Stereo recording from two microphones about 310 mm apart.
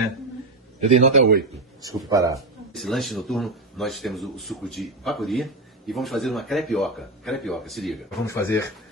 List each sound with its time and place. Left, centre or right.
0.8 s a man's voice: right
1.8 s speech: centre
2.3 s speech: centre